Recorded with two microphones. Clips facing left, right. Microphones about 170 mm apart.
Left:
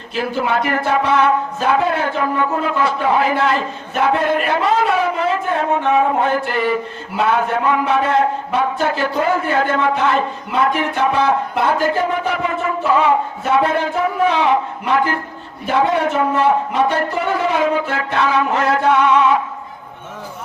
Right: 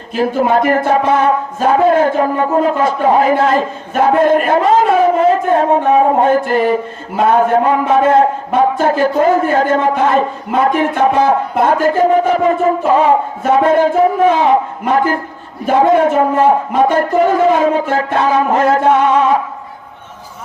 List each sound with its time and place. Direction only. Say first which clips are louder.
0.1 s a man's voice: right 6 dB; 45° right (ahead or behind)